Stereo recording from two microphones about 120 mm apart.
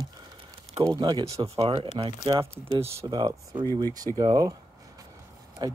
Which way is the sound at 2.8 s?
20° right (ahead or behind).